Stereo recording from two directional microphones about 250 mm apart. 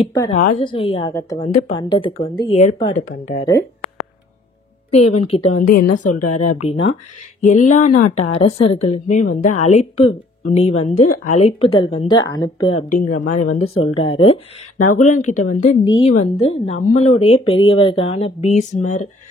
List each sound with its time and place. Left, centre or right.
0.3 s a woman's voice: left
1.4 s a woman's voice: left
5.2 s a woman's voice: left
5.5 s a woman's voice: left
6.4 s a woman's voice: left
12.9 s a woman's voice: left